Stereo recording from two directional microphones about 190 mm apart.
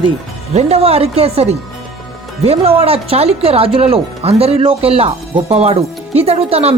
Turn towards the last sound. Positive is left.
turn(degrees=-30)  # may be behind; listen again after turning